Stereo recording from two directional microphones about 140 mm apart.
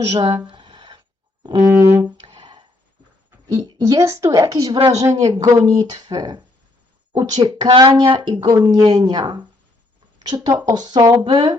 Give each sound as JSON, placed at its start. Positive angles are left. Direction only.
{"t": 0.1, "sound": "speech", "side_deg": -45}
{"t": 0.4, "sound": "a sound", "side_deg": -35}
{"t": 1.5, "sound": "speech", "side_deg": -30}
{"t": 1.9, "sound": "music", "side_deg": -15}
{"t": 2.2, "sound": "music", "side_deg": -40}
{"t": 3.8, "sound": "speech", "side_deg": -20}
{"t": 7.7, "sound": "speech", "side_deg": -35}